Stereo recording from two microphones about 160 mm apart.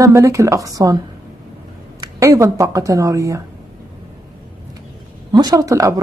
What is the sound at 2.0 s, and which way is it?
Speech, 20° right (ahead or behind).